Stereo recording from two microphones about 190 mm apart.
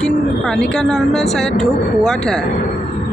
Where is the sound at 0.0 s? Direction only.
5° left (ahead or behind).